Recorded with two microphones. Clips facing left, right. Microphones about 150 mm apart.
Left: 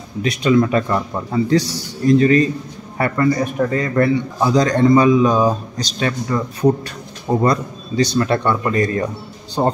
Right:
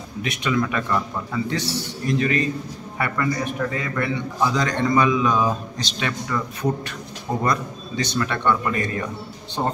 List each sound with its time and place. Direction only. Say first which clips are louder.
0.2 s a man's voice: left 8 dB; 35° left (ahead or behind)